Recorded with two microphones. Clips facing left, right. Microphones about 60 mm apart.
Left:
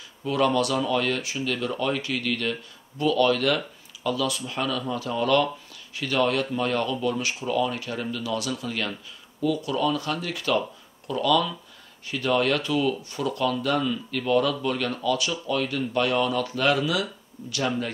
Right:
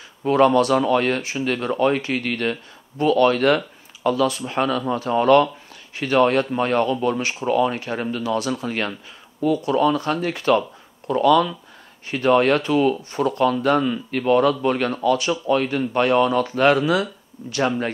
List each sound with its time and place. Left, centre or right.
0.2 s speech: right